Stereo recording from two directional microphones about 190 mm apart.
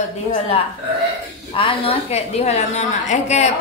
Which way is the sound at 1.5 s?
30° left (ahead or behind).